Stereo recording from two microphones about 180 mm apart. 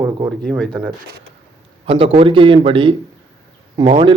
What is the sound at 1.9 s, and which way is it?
A man's voice, 30° right (ahead or behind).